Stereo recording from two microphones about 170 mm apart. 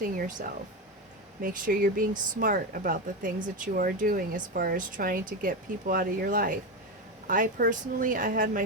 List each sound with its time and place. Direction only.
0.0 s speech: 55° right (ahead or behind)